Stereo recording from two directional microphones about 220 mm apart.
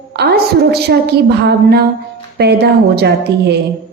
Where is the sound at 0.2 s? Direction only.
45° right (ahead or behind).